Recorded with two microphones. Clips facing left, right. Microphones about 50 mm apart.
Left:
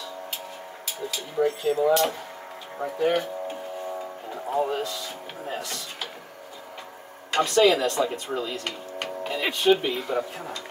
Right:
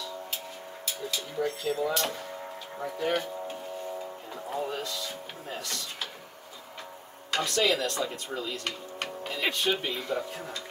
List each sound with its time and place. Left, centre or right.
0.8 s speech: centre
4.3 s speech: centre
7.4 s speech: centre
9.0 s music: left
9.4 s speech: centre